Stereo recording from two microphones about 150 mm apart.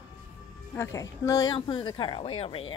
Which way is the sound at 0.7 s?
20° left (ahead or behind).